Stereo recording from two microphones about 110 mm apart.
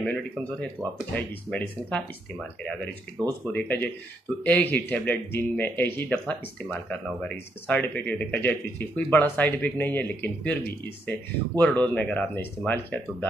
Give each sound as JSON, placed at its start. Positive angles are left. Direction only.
{"t": 0.0, "sound": "speech", "side_deg": 10}
{"t": 3.3, "sound": "speech", "side_deg": 15}